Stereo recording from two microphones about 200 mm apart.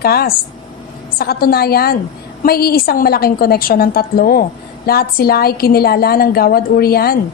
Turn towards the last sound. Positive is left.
turn(degrees=50)  # may be behind; listen again after turning